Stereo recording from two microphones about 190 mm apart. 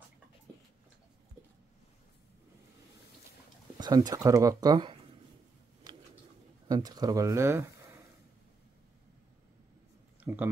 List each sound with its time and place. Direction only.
3.7 s speech: 20° right (ahead or behind)
5.9 s pigeon: 20° right (ahead or behind)
6.7 s speech: 20° right (ahead or behind)
10.2 s a sound: 10° right (ahead or behind)